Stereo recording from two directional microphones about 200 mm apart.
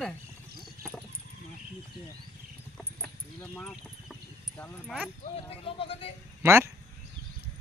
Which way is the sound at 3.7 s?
Centre (ahead or behind).